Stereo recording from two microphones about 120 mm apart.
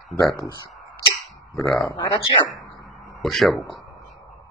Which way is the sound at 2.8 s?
Centre (ahead or behind).